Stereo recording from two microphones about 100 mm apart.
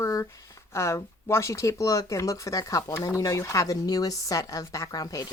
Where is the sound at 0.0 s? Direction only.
35° left (ahead or behind).